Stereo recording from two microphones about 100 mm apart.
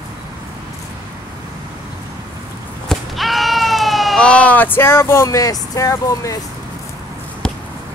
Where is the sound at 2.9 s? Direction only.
Centre (ahead or behind).